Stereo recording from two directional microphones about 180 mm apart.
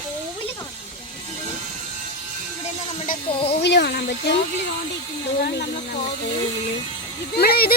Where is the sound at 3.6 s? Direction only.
70° left (ahead or behind).